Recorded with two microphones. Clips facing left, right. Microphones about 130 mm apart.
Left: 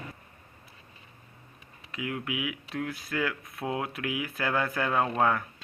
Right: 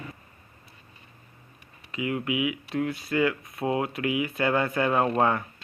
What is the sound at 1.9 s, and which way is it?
Speech, 5° right (ahead or behind).